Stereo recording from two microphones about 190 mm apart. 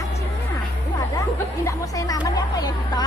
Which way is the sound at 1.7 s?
20° left (ahead or behind).